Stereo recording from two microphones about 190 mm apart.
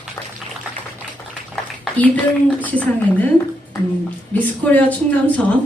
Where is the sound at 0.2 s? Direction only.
15° left (ahead or behind).